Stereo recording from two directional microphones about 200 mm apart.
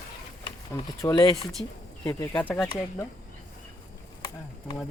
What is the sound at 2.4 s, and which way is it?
Speech, 5° left (ahead or behind).